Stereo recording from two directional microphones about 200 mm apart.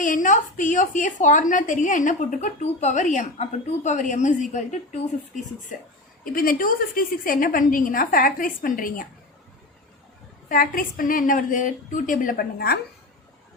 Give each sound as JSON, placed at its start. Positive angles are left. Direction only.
{"t": 0.0, "sound": "a woman's voice", "side_deg": 40}
{"t": 10.5, "sound": "a woman's voice", "side_deg": 45}